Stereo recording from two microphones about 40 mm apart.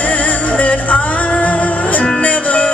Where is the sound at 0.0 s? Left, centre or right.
Left.